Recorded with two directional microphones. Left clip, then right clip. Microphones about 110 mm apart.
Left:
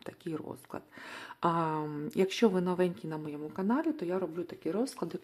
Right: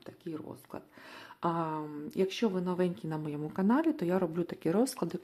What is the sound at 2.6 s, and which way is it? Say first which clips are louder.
Speech: left 1 dB; centre (ahead or behind).